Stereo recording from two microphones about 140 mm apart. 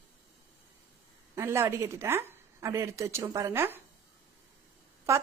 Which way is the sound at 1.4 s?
15° right (ahead or behind).